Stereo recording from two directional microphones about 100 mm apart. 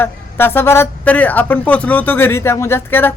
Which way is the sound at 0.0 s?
20° left (ahead or behind).